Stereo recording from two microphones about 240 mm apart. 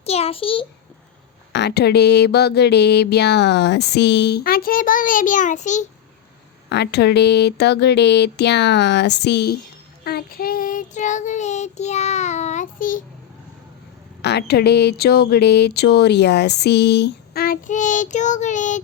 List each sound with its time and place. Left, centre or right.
0.0 s a sound: left
1.5 s speech: left
6.7 s speech: left
10.0 s child singing: left
14.2 s speech: left